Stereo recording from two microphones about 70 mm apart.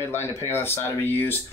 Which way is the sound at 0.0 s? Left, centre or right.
Left.